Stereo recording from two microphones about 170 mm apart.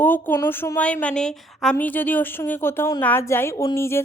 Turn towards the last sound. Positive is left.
turn(degrees=15)  # may be behind; listen again after turning